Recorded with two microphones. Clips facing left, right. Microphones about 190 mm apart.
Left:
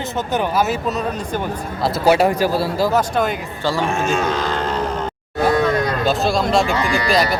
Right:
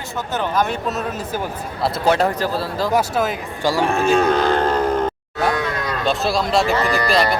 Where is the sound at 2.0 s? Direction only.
10° left (ahead or behind).